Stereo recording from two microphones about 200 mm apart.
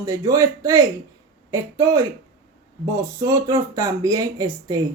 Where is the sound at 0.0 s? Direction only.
15° right (ahead or behind).